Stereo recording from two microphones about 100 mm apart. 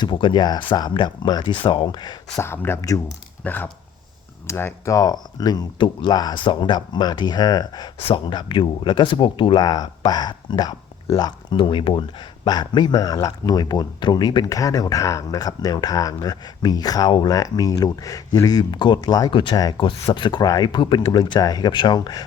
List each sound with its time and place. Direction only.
0.0 s speech: 55° left (ahead or behind)
2.4 s speech: 25° left (ahead or behind)
3.4 s speech: 20° left (ahead or behind)
4.9 s speech: 40° left (ahead or behind)
8.0 s speech: 55° left (ahead or behind)
12.5 s speech: 45° left (ahead or behind)